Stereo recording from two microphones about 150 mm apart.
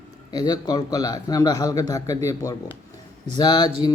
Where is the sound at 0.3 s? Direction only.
25° left (ahead or behind).